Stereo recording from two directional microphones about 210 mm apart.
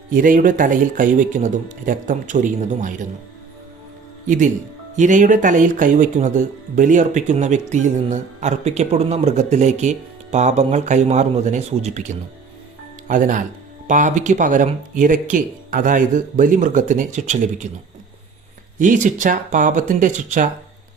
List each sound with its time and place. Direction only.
0.1 s speech: 40° right (ahead or behind)
4.3 s speech: 35° right (ahead or behind)
18.8 s speech: 35° right (ahead or behind)